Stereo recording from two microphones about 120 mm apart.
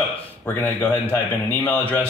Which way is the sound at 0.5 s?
20° left (ahead or behind).